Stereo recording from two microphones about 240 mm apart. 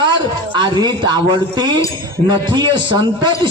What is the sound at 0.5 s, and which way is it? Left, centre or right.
A man's voice, centre.